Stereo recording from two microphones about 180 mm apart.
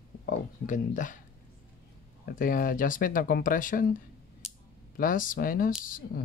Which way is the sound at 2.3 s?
50° left (ahead or behind).